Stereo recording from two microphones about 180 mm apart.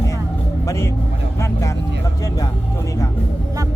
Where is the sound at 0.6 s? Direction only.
15° left (ahead or behind).